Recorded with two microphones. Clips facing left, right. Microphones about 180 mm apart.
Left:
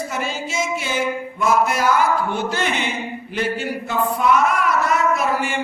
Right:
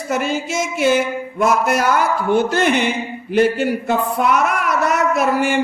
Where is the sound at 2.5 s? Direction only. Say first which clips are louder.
Right 6 dB; 55° right (ahead or behind).